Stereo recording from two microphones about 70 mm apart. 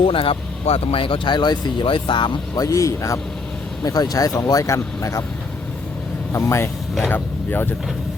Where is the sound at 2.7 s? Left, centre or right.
Left.